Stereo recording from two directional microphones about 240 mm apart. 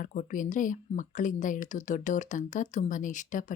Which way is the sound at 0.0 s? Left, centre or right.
Left.